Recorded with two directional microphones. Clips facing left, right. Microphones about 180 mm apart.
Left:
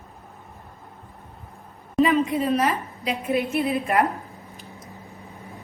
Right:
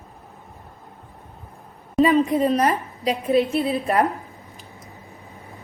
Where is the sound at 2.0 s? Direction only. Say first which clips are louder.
Right 3 dB; 35° right (ahead or behind).